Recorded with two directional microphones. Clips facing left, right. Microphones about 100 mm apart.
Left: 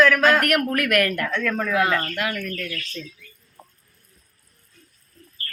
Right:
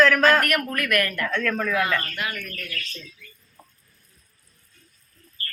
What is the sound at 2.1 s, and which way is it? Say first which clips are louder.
Speech: left 5 dB; 90° left.